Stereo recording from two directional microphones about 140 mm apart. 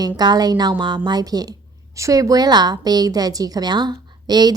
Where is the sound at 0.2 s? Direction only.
30° right (ahead or behind).